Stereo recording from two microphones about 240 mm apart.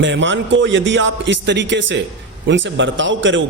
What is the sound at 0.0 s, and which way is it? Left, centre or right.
A man's voice, right.